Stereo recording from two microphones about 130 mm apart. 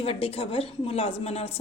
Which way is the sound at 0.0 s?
50° left (ahead or behind).